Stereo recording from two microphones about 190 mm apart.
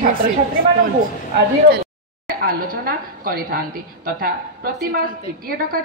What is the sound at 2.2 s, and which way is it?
A woman's voice, 50° right (ahead or behind).